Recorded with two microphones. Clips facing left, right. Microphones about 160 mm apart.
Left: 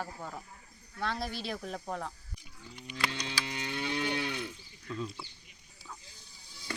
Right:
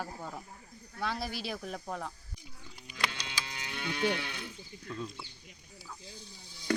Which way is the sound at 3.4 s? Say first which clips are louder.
Left 6 dB; 25° left (ahead or behind).